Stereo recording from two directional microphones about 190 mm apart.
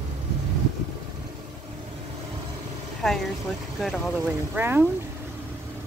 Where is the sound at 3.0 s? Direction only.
Centre (ahead or behind).